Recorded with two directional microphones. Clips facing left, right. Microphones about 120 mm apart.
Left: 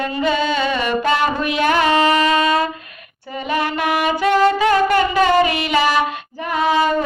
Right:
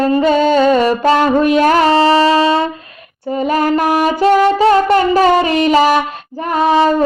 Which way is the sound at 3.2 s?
40° right (ahead or behind).